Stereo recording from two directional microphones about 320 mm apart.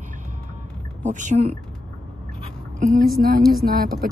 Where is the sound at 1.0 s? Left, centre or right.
Right.